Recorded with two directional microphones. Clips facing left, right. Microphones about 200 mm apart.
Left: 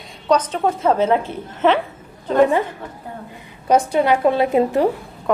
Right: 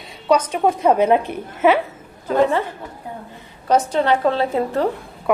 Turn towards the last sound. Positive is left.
turn(degrees=15)  # may be behind; listen again after turning